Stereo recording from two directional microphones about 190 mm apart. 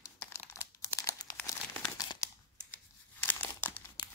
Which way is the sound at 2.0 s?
20° left (ahead or behind).